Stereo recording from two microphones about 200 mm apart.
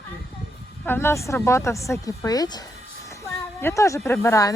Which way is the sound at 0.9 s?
10° left (ahead or behind).